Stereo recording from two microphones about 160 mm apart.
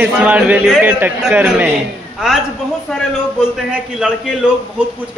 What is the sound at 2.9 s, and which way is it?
A man's voice, 5° right (ahead or behind).